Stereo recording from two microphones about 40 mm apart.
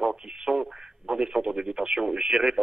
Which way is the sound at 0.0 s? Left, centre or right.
Centre.